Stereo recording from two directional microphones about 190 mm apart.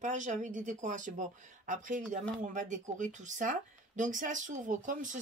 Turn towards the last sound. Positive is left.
turn(degrees=-45)  # may be behind; listen again after turning